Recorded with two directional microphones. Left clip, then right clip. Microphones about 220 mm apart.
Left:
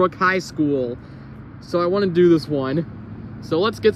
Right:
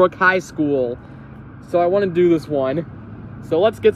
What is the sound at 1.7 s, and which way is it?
Speech, 50° left (ahead or behind).